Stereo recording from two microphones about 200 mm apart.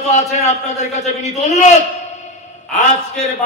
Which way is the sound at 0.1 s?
35° left (ahead or behind).